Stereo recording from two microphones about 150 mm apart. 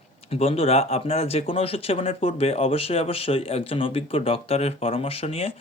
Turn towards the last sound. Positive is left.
turn(degrees=40)  # may be behind; listen again after turning